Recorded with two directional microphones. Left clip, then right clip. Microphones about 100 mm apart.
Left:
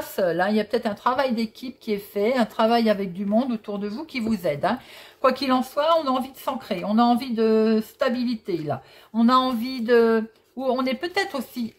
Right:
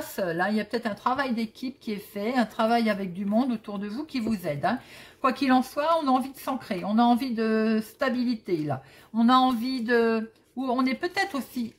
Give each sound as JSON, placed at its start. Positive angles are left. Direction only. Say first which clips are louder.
{"t": 0.1, "sound": "speech", "louder": "left 5 dB", "side_deg": 30}